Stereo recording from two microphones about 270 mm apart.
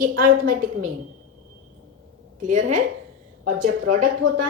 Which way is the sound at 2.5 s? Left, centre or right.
Right.